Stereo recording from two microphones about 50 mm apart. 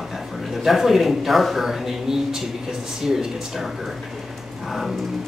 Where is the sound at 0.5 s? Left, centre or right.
Centre.